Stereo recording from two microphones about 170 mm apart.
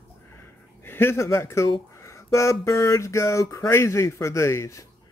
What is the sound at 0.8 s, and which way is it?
Speech, 15° left (ahead or behind).